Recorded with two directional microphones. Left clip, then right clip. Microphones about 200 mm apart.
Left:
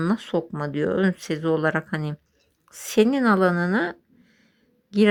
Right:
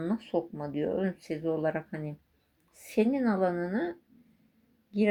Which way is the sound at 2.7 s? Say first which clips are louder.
Left 8 dB; 50° left (ahead or behind).